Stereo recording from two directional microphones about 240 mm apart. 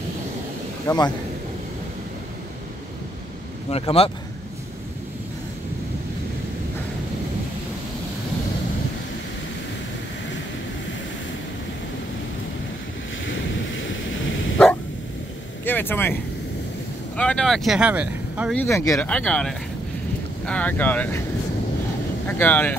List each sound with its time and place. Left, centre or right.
0.8 s speech: centre
3.7 s speech: left
13.2 s waves: left
15.6 s vehicle: centre
17.2 s speech: centre
18.5 s speech: centre
22.2 s speech: centre